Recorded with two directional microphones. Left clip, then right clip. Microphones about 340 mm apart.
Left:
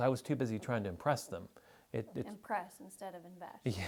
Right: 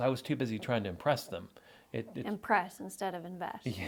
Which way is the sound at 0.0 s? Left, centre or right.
Left.